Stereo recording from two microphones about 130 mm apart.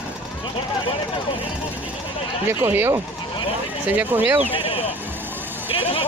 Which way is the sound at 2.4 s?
15° right (ahead or behind).